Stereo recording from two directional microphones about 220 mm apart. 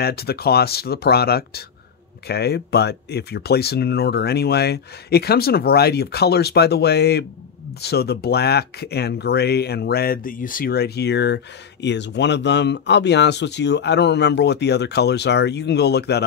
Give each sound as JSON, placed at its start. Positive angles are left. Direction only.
{"t": 0.0, "sound": "speech", "side_deg": 45}